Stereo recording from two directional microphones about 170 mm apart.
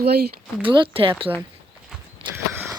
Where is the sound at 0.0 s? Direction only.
70° right (ahead or behind).